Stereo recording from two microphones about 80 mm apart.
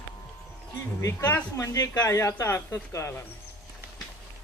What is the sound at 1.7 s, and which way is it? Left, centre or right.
Speech, left.